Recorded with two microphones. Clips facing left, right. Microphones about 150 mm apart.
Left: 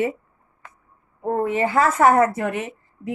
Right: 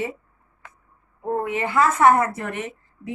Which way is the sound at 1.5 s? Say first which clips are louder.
Even; 40° left (ahead or behind).